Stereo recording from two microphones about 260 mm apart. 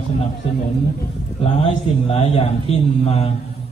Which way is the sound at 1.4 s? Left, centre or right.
Left.